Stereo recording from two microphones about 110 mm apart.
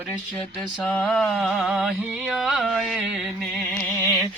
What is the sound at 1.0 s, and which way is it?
Music, 5° left (ahead or behind).